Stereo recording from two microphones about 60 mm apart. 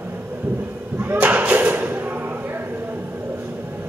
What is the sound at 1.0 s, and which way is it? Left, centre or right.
Slam, right.